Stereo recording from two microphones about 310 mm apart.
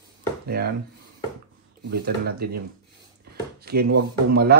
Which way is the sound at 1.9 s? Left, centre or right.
Right.